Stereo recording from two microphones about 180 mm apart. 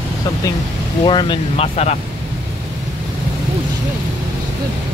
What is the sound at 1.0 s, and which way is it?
Speech, 25° left (ahead or behind).